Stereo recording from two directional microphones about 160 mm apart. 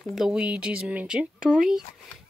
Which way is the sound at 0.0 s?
Centre (ahead or behind).